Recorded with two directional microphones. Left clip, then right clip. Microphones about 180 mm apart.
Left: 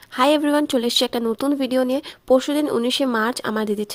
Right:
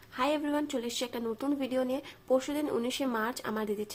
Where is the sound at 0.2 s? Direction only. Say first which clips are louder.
Left 13 dB; 65° left (ahead or behind).